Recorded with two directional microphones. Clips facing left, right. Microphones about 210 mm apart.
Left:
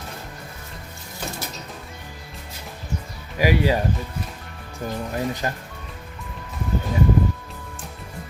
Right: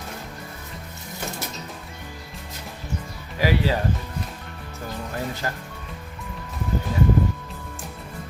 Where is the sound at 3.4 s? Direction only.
15° left (ahead or behind).